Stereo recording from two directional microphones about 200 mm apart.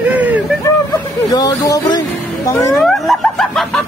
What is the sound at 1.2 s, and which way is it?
Speech, 20° left (ahead or behind).